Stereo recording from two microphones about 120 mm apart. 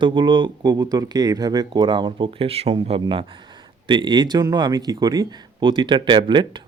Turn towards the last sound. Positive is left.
turn(degrees=-40)  # may be behind; listen again after turning